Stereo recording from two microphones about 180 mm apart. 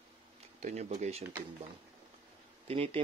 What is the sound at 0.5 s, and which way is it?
Speech, 40° right (ahead or behind).